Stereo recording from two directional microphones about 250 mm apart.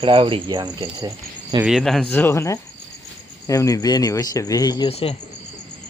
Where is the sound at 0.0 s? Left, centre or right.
Right.